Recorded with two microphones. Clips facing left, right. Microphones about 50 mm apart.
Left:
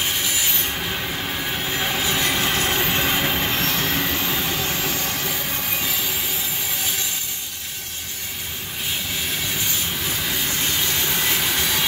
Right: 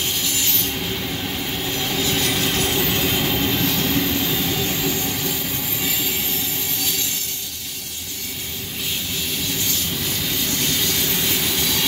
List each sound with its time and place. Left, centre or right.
0.7 s train: left
3.7 s vehicle: left
10.2 s train: left